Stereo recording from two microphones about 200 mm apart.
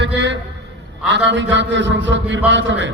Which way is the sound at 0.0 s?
65° right (ahead or behind).